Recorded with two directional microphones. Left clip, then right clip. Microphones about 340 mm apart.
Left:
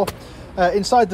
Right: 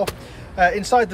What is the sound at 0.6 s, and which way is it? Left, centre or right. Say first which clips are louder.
Speech: left 1 dB; centre.